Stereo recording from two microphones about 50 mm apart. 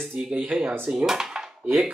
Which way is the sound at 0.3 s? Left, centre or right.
Centre.